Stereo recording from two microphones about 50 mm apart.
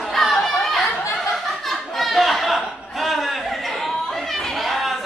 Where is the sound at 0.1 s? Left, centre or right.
Centre.